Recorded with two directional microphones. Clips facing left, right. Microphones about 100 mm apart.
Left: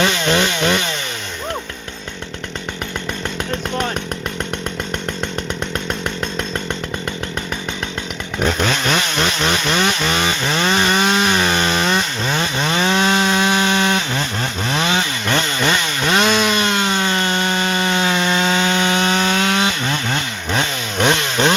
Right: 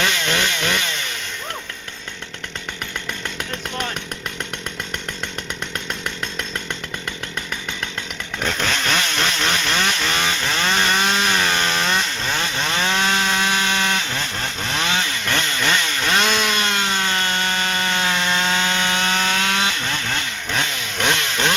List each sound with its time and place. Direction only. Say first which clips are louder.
0.0 s chainsaw: left 5 dB; 25° left (ahead or behind)
8.4 s chainsaw: left 5 dB; 15° left (ahead or behind)